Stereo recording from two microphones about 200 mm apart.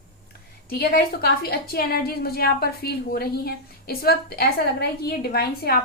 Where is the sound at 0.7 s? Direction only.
50° left (ahead or behind).